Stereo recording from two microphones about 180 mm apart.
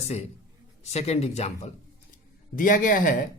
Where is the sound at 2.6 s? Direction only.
50° left (ahead or behind).